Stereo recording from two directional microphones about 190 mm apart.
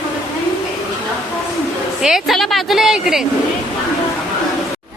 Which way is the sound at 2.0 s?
Centre (ahead or behind).